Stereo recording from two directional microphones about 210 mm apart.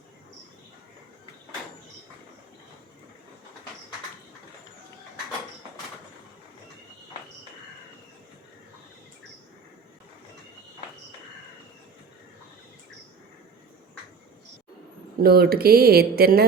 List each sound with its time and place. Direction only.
15.2 s speech: 45° right (ahead or behind)